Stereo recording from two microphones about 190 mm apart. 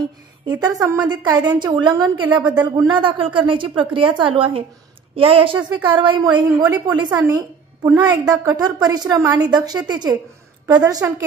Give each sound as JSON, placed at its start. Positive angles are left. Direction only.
{"t": 0.5, "sound": "a woman's voice", "side_deg": -20}